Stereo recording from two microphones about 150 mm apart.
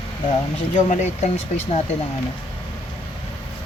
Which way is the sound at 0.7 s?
55° left (ahead or behind).